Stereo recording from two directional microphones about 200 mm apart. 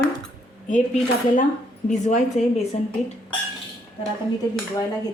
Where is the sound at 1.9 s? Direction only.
35° left (ahead or behind).